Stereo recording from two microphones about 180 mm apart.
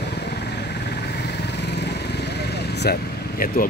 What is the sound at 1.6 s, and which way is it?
Vehicle, 70° left (ahead or behind).